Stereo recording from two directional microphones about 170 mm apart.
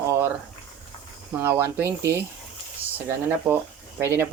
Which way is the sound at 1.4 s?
15° right (ahead or behind).